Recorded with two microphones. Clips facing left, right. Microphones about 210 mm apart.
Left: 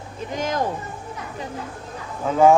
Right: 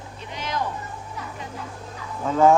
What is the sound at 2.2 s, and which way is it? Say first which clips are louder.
Speech: left 2 dB; 10° left (ahead or behind).